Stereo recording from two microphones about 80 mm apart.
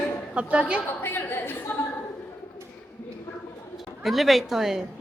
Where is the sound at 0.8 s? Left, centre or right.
Left.